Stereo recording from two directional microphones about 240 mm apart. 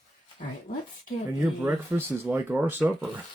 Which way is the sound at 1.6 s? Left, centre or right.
Centre.